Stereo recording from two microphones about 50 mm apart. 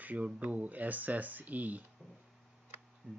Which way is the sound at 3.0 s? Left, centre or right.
Right.